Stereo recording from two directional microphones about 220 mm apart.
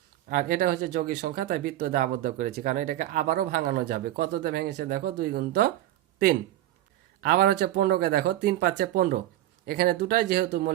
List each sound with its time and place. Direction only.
0.3 s speech: 40° right (ahead or behind)
7.2 s speech: 45° right (ahead or behind)